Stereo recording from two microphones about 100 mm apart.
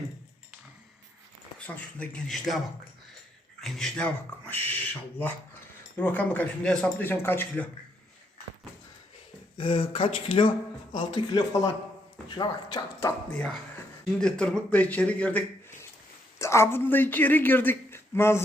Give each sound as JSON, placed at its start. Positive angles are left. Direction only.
{"t": 1.5, "sound": "speech", "side_deg": 15}
{"t": 3.6, "sound": "speech", "side_deg": 5}
{"t": 6.0, "sound": "speech", "side_deg": 15}
{"t": 9.6, "sound": "speech", "side_deg": 60}
{"t": 10.9, "sound": "speech", "side_deg": 50}
{"t": 13.3, "sound": "speech", "side_deg": 10}
{"t": 16.4, "sound": "speech", "side_deg": 25}